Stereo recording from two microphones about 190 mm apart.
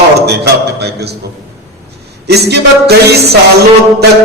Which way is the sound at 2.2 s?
60° right (ahead or behind).